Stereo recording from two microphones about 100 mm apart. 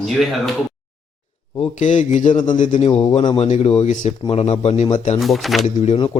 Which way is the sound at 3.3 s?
90° left.